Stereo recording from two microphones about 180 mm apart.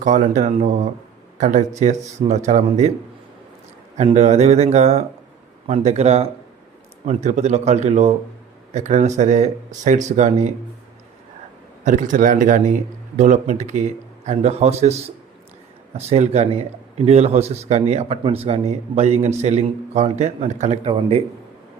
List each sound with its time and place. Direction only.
0.0 s a man's voice: 45° right (ahead or behind)
3.9 s speech: 40° right (ahead or behind)
11.9 s a man's voice: 45° right (ahead or behind)